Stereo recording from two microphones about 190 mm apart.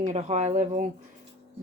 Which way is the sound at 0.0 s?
40° right (ahead or behind).